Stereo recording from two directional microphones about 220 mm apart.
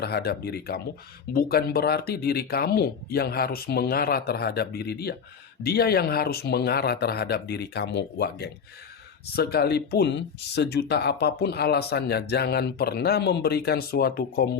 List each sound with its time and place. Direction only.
0.0 s speech: 45° left (ahead or behind)